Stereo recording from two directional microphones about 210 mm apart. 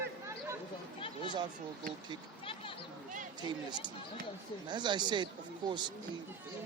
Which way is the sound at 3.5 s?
20° right (ahead or behind).